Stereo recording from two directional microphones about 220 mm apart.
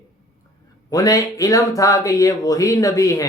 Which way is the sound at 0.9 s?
15° left (ahead or behind).